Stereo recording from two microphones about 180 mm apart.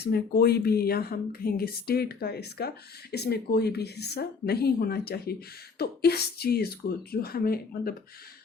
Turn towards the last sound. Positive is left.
turn(degrees=55)  # may be behind; listen again after turning